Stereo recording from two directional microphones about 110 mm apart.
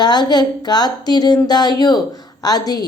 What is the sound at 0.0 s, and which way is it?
Speech, 40° left (ahead or behind).